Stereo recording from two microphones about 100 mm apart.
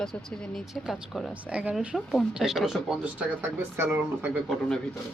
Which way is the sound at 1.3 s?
10° right (ahead or behind).